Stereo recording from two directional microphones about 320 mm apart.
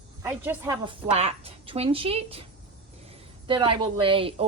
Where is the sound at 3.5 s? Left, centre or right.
Centre.